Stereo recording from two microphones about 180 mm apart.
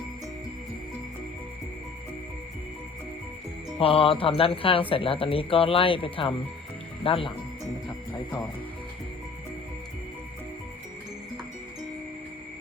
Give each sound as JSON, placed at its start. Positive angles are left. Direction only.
{"t": 3.8, "sound": "speech", "side_deg": 30}